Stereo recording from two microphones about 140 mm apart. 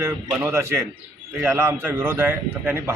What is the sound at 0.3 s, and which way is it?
A man's voice, 20° right (ahead or behind).